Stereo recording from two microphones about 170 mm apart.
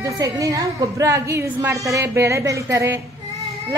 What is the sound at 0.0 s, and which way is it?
A woman's voice, 20° right (ahead or behind).